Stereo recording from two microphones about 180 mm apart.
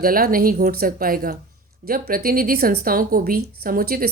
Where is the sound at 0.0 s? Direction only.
55° right (ahead or behind).